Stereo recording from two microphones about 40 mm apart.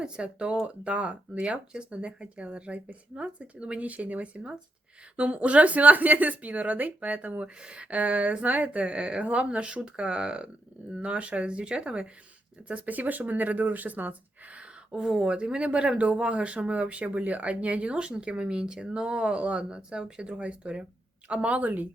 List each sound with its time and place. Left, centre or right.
0.0 s speech: right
7.4 s speech: right